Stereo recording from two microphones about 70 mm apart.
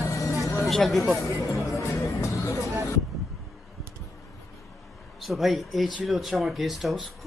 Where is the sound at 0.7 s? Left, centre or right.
Centre.